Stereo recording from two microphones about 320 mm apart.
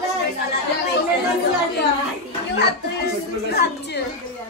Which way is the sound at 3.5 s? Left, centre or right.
Left.